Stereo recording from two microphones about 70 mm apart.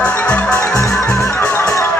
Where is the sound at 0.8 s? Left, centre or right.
Centre.